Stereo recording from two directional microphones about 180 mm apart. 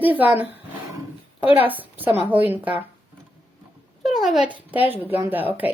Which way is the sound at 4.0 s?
Centre (ahead or behind).